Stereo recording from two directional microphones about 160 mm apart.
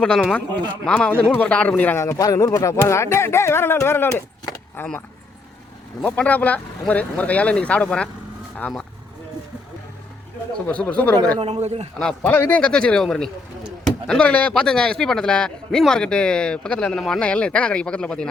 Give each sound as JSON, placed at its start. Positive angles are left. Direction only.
{"t": 0.0, "sound": "a man's voice", "side_deg": 0}
{"t": 2.0, "sound": "speech", "side_deg": 20}
{"t": 10.7, "sound": "speech", "side_deg": 10}
{"t": 11.3, "sound": "speech", "side_deg": -40}
{"t": 11.9, "sound": "a man's voice", "side_deg": 10}